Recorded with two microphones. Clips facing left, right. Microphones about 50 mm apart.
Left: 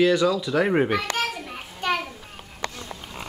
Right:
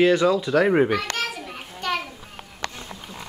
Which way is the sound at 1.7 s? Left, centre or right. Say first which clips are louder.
Left 1 dB; centre.